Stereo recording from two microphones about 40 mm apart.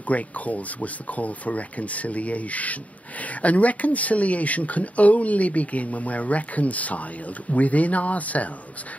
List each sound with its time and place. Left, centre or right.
0.1 s speech: left